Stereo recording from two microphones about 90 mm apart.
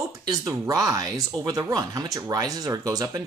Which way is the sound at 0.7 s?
40° right (ahead or behind).